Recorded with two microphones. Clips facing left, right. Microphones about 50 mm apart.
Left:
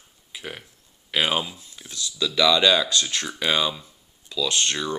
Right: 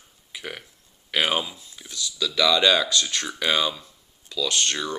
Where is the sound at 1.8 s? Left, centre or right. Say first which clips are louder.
Left 1 dB; centre.